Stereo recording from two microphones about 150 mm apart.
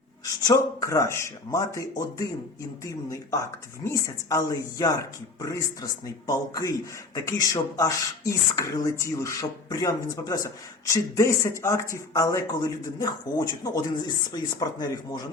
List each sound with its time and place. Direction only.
0.3 s speech: 20° left (ahead or behind)